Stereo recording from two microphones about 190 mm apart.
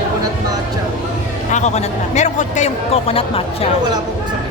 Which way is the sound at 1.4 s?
40° left (ahead or behind).